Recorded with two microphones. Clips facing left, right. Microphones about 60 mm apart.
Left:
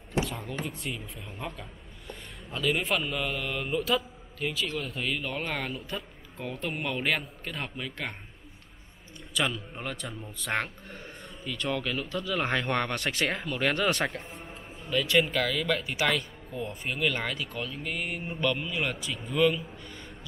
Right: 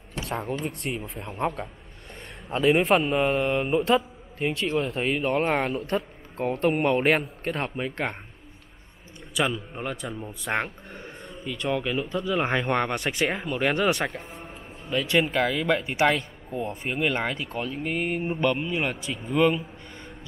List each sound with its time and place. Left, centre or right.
0.7 s speech: right
1.6 s a man's voice: right
5.8 s a man's voice: right
9.3 s speech: centre
11.2 s a sound: centre
11.5 s speech: centre
14.0 s speech: centre
14.9 s a man's voice: right